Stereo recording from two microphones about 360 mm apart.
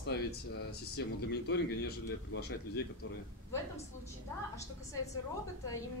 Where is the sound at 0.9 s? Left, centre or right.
Left.